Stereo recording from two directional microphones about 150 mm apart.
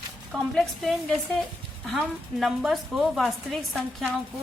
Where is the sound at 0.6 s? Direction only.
Centre (ahead or behind).